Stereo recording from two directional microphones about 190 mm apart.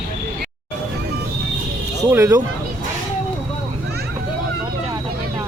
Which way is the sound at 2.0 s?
15° right (ahead or behind).